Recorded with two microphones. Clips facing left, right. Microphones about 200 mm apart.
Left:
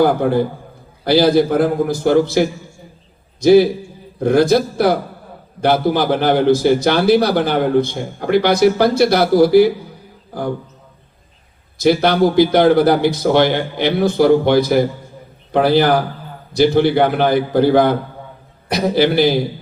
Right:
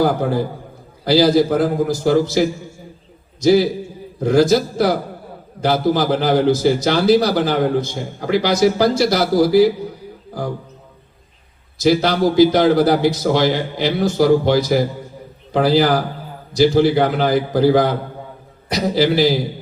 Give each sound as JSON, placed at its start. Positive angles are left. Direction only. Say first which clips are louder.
{"t": 0.0, "sound": "a man's voice", "louder": "left 3 dB", "side_deg": 60}
{"t": 11.8, "sound": "a man's voice", "louder": "left 2 dB", "side_deg": 60}